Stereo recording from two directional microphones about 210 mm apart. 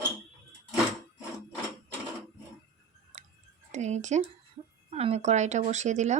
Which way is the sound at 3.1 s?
35° right (ahead or behind).